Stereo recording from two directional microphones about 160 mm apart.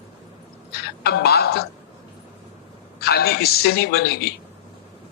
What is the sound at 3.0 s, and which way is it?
Speech, 75° left (ahead or behind).